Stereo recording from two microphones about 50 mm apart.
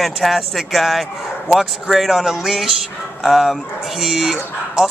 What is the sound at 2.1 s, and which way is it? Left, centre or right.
Music, centre.